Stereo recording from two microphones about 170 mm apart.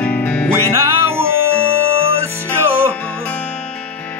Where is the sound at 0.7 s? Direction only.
15° right (ahead or behind).